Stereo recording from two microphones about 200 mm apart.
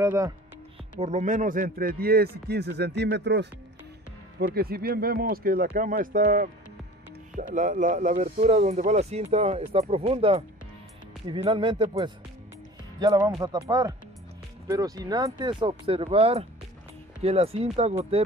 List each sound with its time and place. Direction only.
0.0 s speech: 15° right (ahead or behind)
1.0 s a man's voice: 35° right (ahead or behind)
7.5 s speech: 40° right (ahead or behind)